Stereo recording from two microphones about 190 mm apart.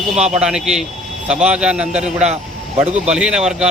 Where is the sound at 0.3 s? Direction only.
5° right (ahead or behind).